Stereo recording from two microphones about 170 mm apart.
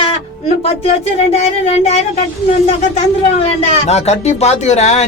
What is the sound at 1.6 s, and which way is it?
Speech, 40° left (ahead or behind).